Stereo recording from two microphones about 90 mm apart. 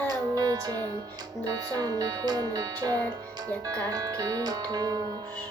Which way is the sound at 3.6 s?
40° right (ahead or behind).